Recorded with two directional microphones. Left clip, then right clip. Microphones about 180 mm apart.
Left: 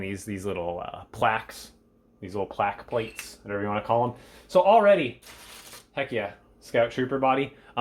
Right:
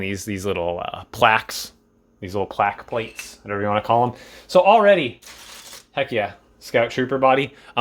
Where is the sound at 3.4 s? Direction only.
45° right (ahead or behind).